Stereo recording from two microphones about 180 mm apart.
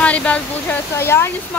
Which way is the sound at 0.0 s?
5° left (ahead or behind).